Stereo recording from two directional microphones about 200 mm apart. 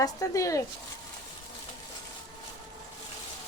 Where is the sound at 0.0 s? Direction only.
15° left (ahead or behind).